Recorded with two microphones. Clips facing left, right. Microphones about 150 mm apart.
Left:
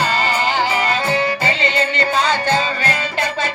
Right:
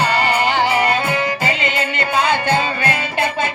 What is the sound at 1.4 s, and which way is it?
Music, 45° right (ahead or behind).